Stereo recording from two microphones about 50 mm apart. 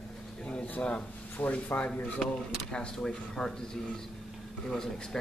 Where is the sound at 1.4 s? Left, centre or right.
Left.